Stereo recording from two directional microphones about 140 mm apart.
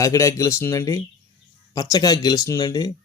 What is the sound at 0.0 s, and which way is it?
A man's voice, 20° left (ahead or behind).